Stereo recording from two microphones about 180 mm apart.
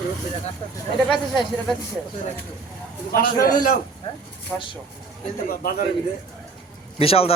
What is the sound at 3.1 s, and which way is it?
Speech, 50° left (ahead or behind).